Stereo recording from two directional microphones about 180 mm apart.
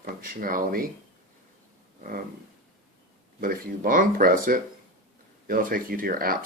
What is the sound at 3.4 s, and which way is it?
Speech, 50° right (ahead or behind).